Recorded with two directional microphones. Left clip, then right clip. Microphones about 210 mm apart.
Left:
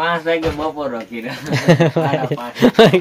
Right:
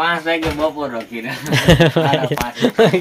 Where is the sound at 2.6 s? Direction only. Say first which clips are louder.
Left 5 dB; 30° left (ahead or behind).